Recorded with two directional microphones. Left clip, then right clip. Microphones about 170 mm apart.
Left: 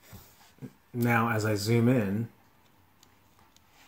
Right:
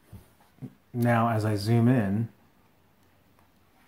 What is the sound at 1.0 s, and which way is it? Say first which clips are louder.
Speech: right 1 dB; 10° right (ahead or behind).